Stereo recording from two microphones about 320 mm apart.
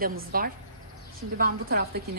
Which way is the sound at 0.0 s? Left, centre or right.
Right.